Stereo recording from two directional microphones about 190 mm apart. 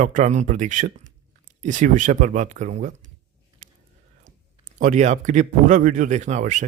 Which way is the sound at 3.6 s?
40° right (ahead or behind).